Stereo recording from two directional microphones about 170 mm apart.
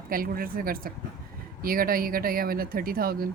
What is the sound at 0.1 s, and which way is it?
Speech, 55° right (ahead or behind).